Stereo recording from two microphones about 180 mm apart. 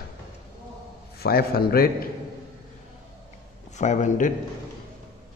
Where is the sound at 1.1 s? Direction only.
60° left (ahead or behind).